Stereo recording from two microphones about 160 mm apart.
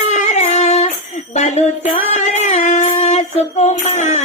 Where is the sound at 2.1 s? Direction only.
45° left (ahead or behind).